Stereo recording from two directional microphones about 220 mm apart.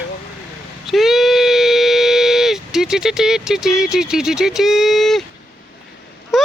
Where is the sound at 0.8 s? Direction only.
Centre (ahead or behind).